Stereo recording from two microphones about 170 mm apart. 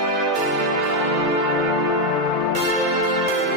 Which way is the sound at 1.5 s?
Centre (ahead or behind).